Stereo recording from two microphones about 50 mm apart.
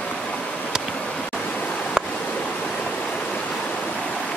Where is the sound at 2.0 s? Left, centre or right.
Centre.